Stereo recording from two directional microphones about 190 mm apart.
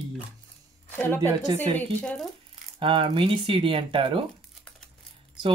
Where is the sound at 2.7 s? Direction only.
25° right (ahead or behind).